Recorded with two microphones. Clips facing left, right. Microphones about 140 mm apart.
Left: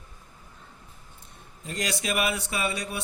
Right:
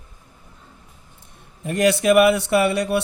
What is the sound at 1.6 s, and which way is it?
A man's voice, 60° right (ahead or behind).